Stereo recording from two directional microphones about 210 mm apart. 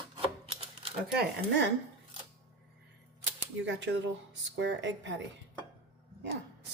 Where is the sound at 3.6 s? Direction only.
60° right (ahead or behind).